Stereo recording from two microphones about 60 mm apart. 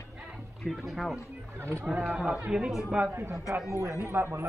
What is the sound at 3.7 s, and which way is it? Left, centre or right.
Speech, right.